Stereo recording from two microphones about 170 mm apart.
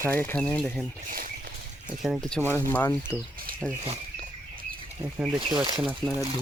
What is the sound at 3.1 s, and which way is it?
Speech, 10° right (ahead or behind).